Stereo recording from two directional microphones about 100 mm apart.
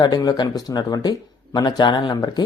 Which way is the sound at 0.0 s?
40° left (ahead or behind).